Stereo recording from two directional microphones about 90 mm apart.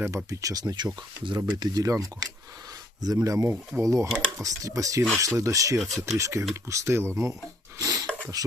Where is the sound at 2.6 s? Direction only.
45° right (ahead or behind).